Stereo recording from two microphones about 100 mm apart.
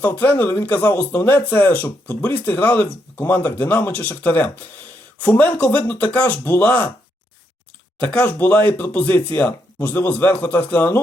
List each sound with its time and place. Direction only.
0.0 s speech: 20° left (ahead or behind)
7.9 s speech: 10° left (ahead or behind)